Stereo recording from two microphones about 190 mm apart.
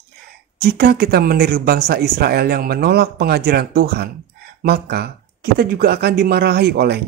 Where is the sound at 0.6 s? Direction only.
55° right (ahead or behind).